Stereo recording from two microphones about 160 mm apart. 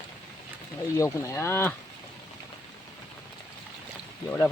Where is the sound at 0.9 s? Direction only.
20° left (ahead or behind).